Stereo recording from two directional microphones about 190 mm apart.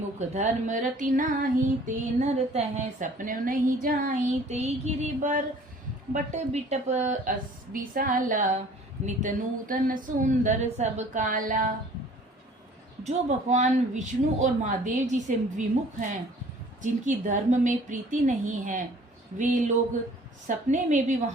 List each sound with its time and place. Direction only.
0.2 s a woman's voice: 40° right (ahead or behind)
13.1 s a woman's voice: 40° right (ahead or behind)